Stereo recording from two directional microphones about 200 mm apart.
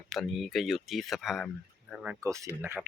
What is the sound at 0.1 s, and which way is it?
Speech, centre (ahead or behind).